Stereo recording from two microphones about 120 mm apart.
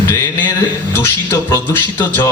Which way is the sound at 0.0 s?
25° left (ahead or behind).